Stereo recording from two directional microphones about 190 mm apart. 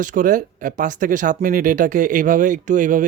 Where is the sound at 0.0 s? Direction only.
45° right (ahead or behind).